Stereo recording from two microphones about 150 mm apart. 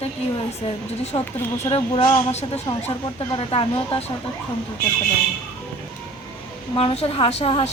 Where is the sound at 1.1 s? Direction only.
30° left (ahead or behind).